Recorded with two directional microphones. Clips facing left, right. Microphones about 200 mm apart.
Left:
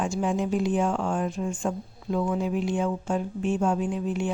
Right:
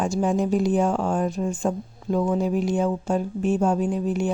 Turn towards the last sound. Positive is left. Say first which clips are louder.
# right 4 dB
turn(degrees=-40)  # may be behind; listen again after turning